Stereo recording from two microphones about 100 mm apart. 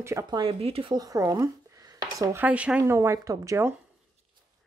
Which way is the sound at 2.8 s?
30° right (ahead or behind).